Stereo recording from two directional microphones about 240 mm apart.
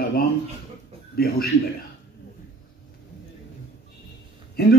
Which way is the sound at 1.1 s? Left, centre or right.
Left.